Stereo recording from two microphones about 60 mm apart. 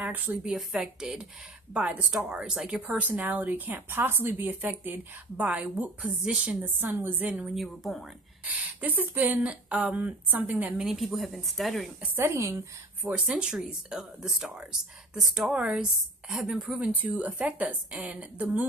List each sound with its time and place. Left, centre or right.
0.0 s a woman's voice: right
0.4 s speech: centre
1.7 s speech: centre
6.6 s a woman's voice: right
7.6 s speech: centre
8.5 s speech: right
10.6 s speech: centre
11.0 s speech: centre
12.2 s speech: right
13.1 s speech: centre
16.9 s speech: right